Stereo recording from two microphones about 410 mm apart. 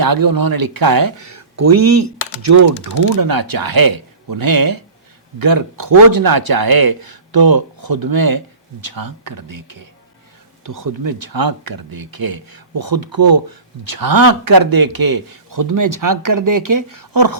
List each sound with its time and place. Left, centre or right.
0.0 s speech: right
3.2 s speech: right